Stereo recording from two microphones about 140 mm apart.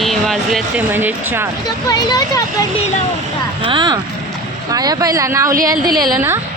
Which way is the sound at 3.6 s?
35° right (ahead or behind).